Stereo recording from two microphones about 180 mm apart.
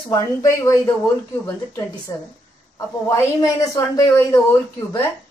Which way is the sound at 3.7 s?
20° left (ahead or behind).